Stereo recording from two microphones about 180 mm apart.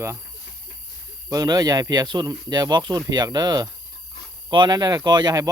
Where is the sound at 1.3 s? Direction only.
20° right (ahead or behind).